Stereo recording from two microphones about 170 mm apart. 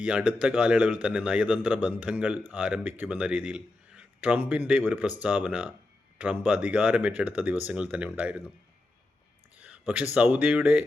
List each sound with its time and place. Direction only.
0.0 s a man's voice: 5° right (ahead or behind)
9.6 s a sound: 10° right (ahead or behind)
10.2 s a man's voice: 10° right (ahead or behind)